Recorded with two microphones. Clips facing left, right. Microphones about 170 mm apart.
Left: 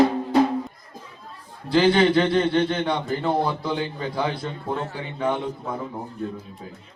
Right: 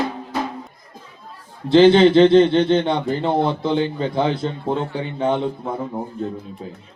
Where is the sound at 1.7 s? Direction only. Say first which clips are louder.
Right 7 dB; 25° right (ahead or behind).